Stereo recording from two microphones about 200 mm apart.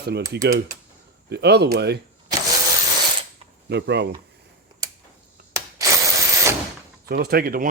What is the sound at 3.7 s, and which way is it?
Speech, 60° right (ahead or behind).